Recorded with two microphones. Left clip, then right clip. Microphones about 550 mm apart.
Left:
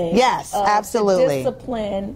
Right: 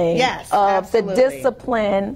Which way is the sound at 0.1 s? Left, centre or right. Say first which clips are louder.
Left 2 dB; left.